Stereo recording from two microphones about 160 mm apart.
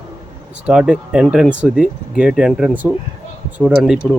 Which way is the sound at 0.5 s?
5° right (ahead or behind).